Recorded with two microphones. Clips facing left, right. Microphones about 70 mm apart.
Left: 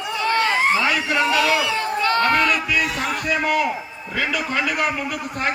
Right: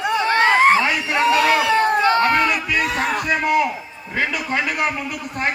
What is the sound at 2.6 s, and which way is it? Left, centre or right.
Speech, right.